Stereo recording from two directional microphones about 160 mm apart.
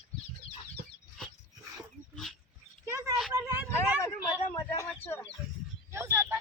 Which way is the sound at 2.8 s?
15° right (ahead or behind).